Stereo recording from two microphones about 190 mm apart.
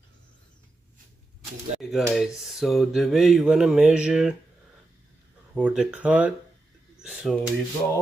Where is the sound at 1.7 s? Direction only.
35° right (ahead or behind).